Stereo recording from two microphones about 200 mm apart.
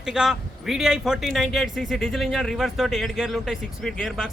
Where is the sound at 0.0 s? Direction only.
5° right (ahead or behind).